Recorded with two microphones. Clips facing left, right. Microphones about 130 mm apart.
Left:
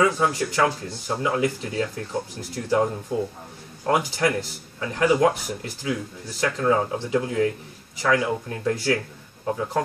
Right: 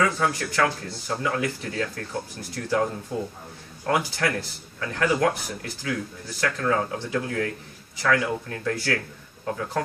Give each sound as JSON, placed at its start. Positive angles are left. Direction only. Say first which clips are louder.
{"t": 0.0, "sound": "a man's voice", "louder": "left 3 dB", "side_deg": 20}